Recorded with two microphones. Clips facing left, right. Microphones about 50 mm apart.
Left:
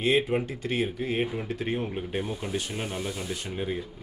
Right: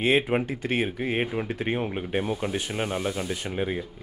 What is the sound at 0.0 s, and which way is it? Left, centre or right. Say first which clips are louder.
Speech: right 2 dB; right.